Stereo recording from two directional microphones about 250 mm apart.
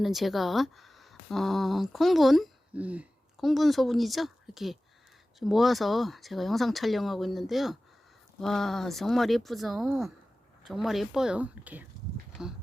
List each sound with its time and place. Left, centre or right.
0.0 s speech: centre